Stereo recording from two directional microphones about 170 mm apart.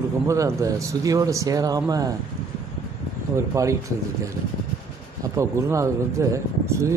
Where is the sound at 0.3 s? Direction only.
20° right (ahead or behind).